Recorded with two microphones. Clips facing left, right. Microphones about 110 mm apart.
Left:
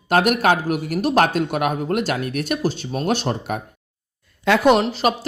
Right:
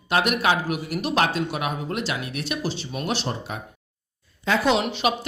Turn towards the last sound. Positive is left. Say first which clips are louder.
# left 6 dB
turn(degrees=40)  # may be behind; listen again after turning